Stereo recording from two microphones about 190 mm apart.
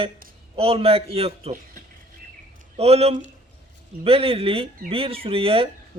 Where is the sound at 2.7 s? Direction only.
35° right (ahead or behind).